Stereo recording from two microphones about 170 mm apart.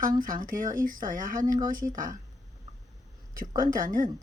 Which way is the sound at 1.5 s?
20° right (ahead or behind).